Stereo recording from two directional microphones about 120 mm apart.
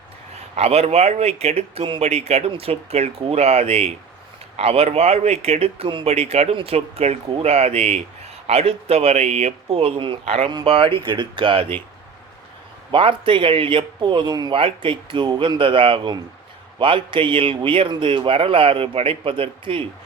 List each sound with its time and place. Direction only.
0.5 s speech: 60° right (ahead or behind)
6.1 s a man's voice: 60° right (ahead or behind); by 11.6 s 45° right (ahead or behind)
12.9 s a man's voice: 45° right (ahead or behind)
14.5 s a man's voice: 45° right (ahead or behind)